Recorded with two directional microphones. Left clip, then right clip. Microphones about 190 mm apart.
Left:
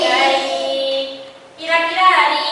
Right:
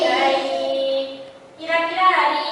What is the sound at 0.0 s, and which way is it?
Music, 10° right (ahead or behind).